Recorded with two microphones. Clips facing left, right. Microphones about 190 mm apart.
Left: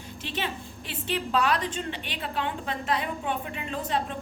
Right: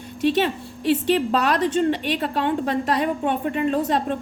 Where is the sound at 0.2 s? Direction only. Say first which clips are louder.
Right 13 dB; 70° right (ahead or behind).